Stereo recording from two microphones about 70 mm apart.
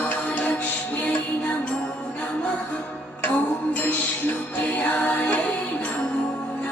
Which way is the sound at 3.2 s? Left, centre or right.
Left.